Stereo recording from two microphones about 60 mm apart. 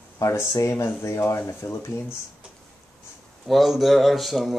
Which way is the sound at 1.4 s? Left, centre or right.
Left.